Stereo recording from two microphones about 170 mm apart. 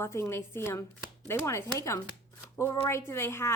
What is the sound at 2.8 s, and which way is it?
Speech, 15° left (ahead or behind).